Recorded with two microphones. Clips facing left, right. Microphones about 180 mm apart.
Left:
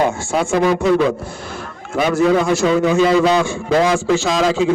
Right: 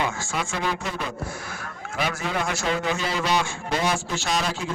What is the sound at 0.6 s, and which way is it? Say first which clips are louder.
Speech: left 14 dB; 90° left.